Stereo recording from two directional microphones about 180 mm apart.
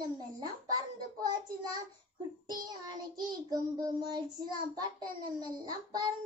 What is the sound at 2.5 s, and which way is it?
Speech, 25° right (ahead or behind).